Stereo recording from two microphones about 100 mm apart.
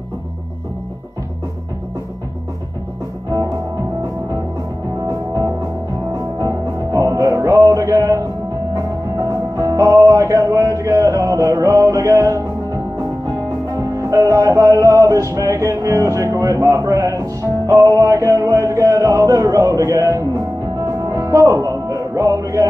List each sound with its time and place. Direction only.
5.0 s music: 35° right (ahead or behind)
9.3 s music: 35° right (ahead or behind)
13.9 s music: 35° right (ahead or behind)